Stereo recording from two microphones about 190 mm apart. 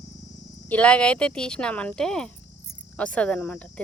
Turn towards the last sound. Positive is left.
turn(degrees=5)  # may be behind; listen again after turning